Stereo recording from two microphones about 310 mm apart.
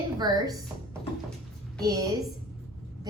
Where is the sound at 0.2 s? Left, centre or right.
Centre.